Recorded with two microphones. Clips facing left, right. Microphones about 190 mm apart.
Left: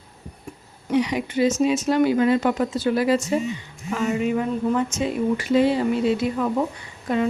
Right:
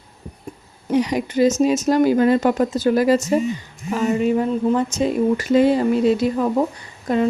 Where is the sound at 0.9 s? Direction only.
40° right (ahead or behind).